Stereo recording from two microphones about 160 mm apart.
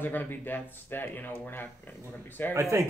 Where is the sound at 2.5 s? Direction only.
20° right (ahead or behind).